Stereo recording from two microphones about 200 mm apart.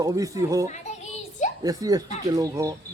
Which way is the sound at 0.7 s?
35° left (ahead or behind).